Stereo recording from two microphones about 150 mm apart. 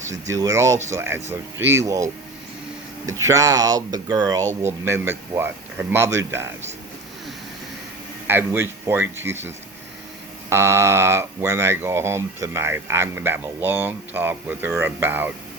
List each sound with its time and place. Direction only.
0.1 s speech: 20° right (ahead or behind)
3.1 s speech: 20° right (ahead or behind)
4.6 s speech: 15° right (ahead or behind)
8.3 s speech: 15° right (ahead or behind)
10.5 s speech: 15° right (ahead or behind)